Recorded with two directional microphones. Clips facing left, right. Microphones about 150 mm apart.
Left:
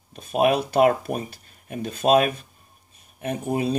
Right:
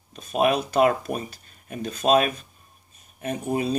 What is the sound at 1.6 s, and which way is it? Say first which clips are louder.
Speech: left 2 dB; 55° left (ahead or behind).